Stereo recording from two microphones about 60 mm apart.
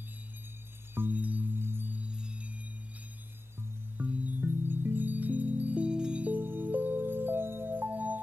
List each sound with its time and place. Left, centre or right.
0.9 s chime: right
2.0 s music: centre
4.0 s chime: right
5.9 s wind chime: centre
6.2 s music: right